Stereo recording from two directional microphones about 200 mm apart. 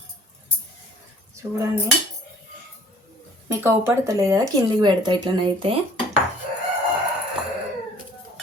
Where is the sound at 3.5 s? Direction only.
10° right (ahead or behind).